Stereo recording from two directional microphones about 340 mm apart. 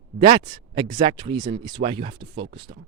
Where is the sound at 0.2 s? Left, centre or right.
Centre.